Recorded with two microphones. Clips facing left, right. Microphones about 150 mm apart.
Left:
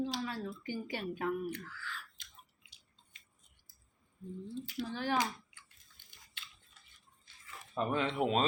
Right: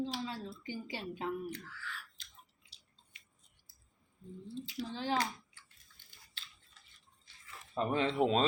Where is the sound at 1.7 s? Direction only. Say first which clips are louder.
Left 1 dB; centre (ahead or behind).